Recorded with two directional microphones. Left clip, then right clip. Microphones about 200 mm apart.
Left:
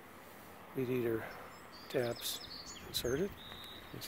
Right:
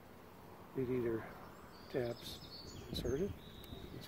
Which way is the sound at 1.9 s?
55° left (ahead or behind).